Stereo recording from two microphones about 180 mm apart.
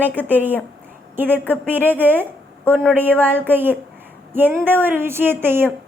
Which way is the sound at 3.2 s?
10° right (ahead or behind).